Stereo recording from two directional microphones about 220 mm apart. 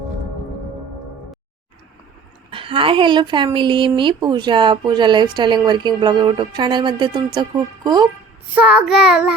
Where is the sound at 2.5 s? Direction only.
25° right (ahead or behind).